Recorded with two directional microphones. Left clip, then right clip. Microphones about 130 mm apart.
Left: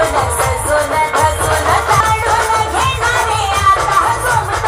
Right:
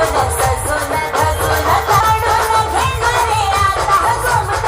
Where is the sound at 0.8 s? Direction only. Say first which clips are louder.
Left 3 dB; 35° left (ahead or behind).